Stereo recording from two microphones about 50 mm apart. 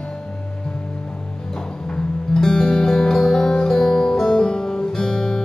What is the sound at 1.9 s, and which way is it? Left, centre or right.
Music, centre.